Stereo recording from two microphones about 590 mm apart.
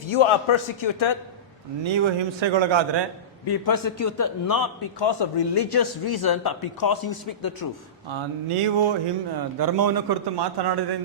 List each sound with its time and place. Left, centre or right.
0.1 s a man's voice: left
1.8 s a man's voice: right
3.4 s a man's voice: left
8.4 s a sound: right
9.3 s a man's voice: right